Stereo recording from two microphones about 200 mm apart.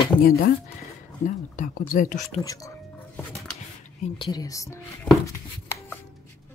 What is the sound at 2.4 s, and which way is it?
Whispering, 15° left (ahead or behind).